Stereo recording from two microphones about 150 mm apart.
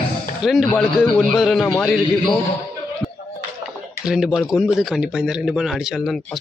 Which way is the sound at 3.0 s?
20° left (ahead or behind).